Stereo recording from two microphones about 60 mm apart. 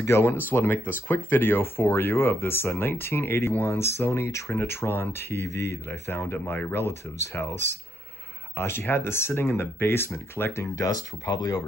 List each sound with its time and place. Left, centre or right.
0.0 s speech: left
10.9 s speech: left